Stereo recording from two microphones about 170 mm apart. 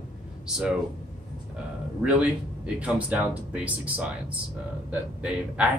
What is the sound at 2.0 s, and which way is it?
Speech, 5° right (ahead or behind).